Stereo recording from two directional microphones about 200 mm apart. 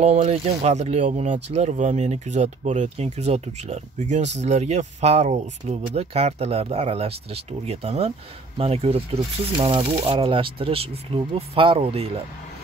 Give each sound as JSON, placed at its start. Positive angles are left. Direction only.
{"t": 0.0, "sound": "speech", "side_deg": -35}